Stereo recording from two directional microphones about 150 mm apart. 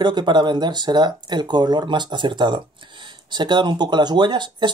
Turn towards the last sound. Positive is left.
turn(degrees=-30)  # may be behind; listen again after turning